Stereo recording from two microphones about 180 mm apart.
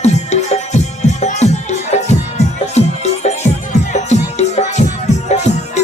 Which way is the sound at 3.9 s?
40° left (ahead or behind).